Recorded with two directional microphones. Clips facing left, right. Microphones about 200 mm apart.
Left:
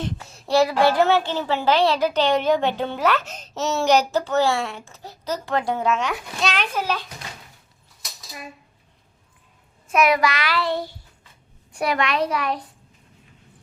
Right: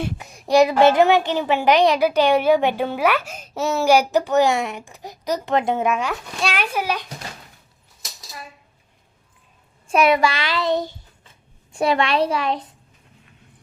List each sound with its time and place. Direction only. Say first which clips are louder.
0.0 s a child's voice: right 2 dB; 15° right (ahead or behind)
9.8 s a child's voice: right 2 dB; 30° right (ahead or behind)